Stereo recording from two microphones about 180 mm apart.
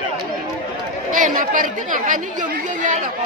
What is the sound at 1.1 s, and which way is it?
Speech, 45° right (ahead or behind).